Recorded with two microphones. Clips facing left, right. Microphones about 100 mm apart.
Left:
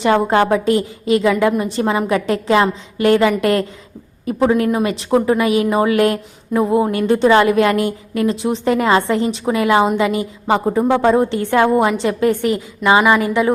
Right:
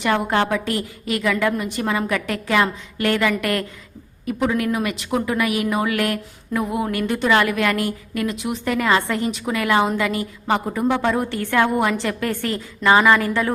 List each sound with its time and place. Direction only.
0.0 s a woman's voice: 25° left (ahead or behind)